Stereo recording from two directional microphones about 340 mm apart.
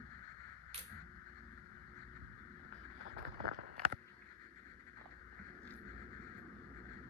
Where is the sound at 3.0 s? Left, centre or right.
Right.